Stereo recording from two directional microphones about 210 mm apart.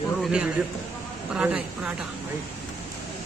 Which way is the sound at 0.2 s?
5° right (ahead or behind).